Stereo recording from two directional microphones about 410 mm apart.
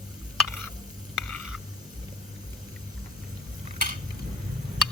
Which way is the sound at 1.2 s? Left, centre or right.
Centre.